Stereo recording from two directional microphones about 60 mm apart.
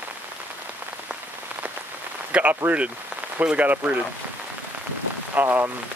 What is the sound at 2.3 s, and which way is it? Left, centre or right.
Speech, centre.